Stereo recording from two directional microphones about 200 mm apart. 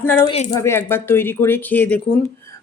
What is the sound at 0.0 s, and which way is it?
Speech, 10° left (ahead or behind).